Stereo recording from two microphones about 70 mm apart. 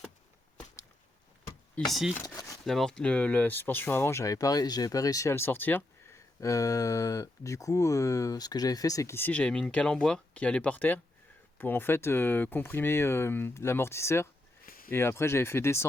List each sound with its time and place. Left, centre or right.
1.8 s speech: centre
2.2 s speech: left
2.6 s speech: centre; by 4.2 s left
4.2 s speech: left
5.3 s speech: left
6.1 s speech: left
9.5 s speech: centre
11.5 s speech: left